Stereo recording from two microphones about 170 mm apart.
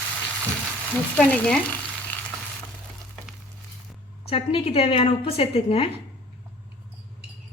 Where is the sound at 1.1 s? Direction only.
10° left (ahead or behind).